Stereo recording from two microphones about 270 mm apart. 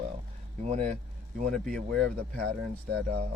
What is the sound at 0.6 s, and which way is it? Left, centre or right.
Speech, right.